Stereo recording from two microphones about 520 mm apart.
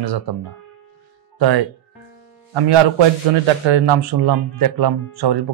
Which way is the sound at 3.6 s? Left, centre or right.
Right.